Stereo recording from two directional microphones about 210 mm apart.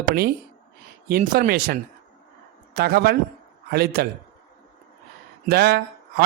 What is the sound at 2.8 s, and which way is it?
Speech, 50° right (ahead or behind).